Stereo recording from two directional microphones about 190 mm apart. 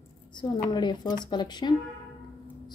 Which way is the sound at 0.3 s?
20° left (ahead or behind).